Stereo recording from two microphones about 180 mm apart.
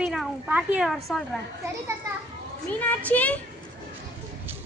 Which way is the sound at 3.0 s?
10° left (ahead or behind).